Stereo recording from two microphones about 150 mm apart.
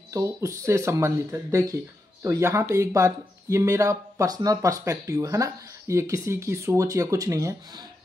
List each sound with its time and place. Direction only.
0.1 s speech: 20° right (ahead or behind)